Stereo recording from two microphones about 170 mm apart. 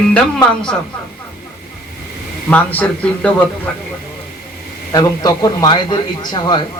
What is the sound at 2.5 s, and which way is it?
A man's voice, 10° left (ahead or behind).